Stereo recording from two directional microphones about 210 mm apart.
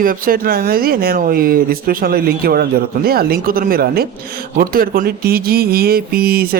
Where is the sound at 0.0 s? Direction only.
45° right (ahead or behind).